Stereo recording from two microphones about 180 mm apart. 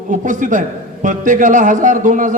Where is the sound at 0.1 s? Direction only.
45° right (ahead or behind).